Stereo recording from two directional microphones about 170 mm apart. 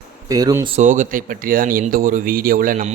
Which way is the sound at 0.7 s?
45° right (ahead or behind).